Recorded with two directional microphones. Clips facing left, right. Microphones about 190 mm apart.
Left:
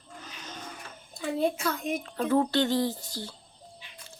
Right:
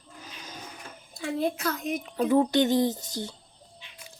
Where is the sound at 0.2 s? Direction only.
10° right (ahead or behind).